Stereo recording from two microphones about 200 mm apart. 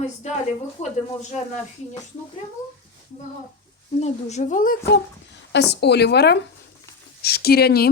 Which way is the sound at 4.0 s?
35° left (ahead or behind).